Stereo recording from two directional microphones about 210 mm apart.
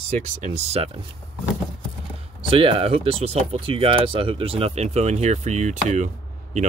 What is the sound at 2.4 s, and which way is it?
Speech, 25° right (ahead or behind).